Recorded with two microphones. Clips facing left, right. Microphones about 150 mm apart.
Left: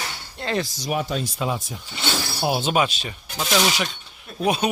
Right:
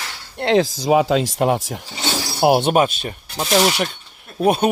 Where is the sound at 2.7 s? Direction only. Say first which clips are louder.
Right 5 dB; 50° right (ahead or behind).